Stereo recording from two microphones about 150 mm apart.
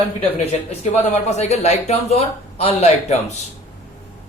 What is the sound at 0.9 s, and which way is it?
A man's voice, 45° left (ahead or behind).